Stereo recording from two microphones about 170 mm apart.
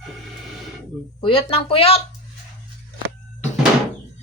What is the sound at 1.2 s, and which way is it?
Speech, 30° left (ahead or behind).